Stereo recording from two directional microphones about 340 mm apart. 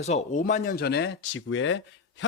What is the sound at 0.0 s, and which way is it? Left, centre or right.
Speech, centre.